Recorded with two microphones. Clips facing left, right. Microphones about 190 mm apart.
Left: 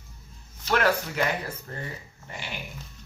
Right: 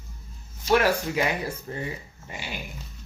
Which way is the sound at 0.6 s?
10° right (ahead or behind).